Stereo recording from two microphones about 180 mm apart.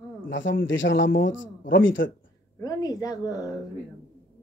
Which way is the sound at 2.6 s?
20° left (ahead or behind).